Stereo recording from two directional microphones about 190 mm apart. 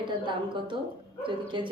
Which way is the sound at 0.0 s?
25° right (ahead or behind).